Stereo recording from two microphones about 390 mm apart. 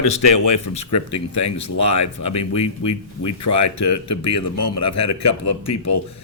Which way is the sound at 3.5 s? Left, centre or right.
Left.